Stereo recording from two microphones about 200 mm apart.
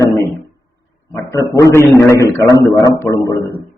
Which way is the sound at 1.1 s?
15° left (ahead or behind).